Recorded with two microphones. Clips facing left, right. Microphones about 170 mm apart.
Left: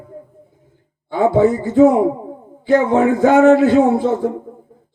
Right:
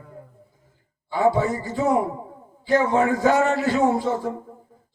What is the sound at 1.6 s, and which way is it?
Speech, 55° left (ahead or behind).